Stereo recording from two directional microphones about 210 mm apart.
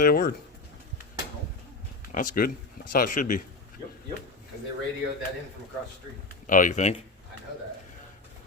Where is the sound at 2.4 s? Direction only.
40° left (ahead or behind).